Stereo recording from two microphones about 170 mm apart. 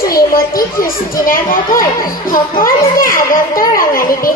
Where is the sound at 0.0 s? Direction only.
60° left (ahead or behind).